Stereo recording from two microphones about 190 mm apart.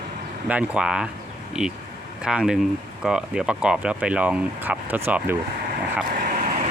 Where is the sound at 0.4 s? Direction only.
5° right (ahead or behind).